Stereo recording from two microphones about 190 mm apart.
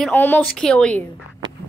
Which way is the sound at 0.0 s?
10° left (ahead or behind).